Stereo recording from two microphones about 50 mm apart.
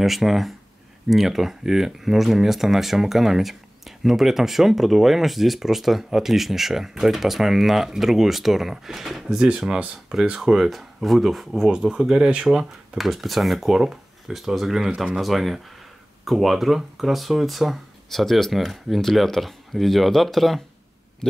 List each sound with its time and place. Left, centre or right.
0.0 s speech: centre
12.9 s speech: centre
21.2 s a sound: centre